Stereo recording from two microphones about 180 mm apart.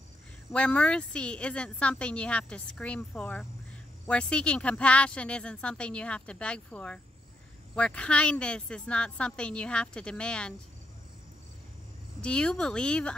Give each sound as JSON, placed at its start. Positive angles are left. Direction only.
{"t": 0.5, "sound": "a woman's voice", "side_deg": 5}
{"t": 12.2, "sound": "a woman's voice", "side_deg": 5}